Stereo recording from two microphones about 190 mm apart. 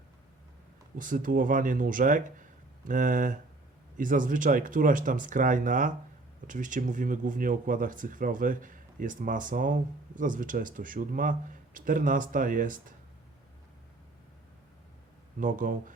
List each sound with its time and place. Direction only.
0.9 s speech: 45° right (ahead or behind)
15.4 s speech: 45° right (ahead or behind)